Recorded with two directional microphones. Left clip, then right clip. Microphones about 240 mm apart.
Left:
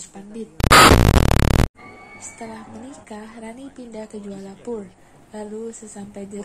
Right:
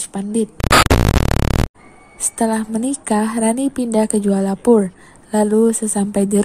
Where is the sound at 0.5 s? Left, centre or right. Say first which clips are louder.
Left 3 dB; centre.